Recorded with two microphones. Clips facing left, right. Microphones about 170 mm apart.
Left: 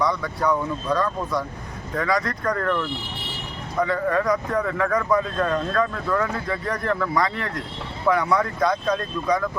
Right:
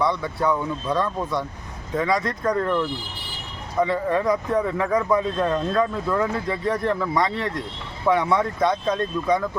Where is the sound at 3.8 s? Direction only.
25° right (ahead or behind).